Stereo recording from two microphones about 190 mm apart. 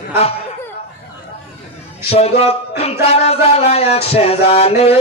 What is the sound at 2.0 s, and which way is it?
Speech, 30° left (ahead or behind).